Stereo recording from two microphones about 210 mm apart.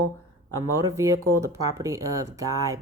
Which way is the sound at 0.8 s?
15° right (ahead or behind).